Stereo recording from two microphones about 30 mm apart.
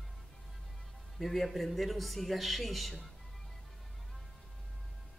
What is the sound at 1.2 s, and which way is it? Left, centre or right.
A man's voice, centre.